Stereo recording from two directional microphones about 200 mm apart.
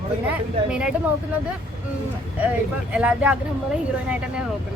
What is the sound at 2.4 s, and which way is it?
Speech, 5° right (ahead or behind).